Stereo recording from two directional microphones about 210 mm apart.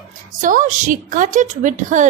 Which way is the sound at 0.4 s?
40° right (ahead or behind).